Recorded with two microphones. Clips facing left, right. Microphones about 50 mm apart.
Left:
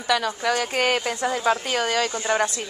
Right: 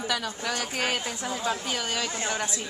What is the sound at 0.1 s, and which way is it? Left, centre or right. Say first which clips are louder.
Speech: left 11 dB; left.